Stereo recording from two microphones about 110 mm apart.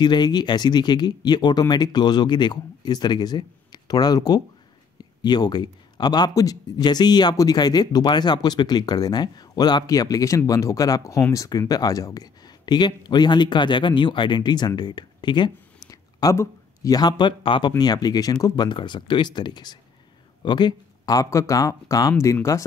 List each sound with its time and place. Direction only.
0.0 s speech: 40° left (ahead or behind)
15.9 s speech: 30° left (ahead or behind)